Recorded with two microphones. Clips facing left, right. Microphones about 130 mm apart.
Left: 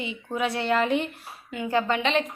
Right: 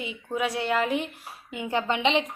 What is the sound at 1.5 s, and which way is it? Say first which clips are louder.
Speech: left 2 dB; 20° right (ahead or behind).